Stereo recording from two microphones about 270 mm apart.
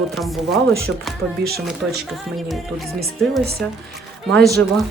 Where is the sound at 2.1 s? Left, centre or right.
Centre.